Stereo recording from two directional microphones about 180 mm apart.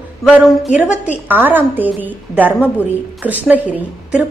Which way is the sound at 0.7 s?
5° right (ahead or behind).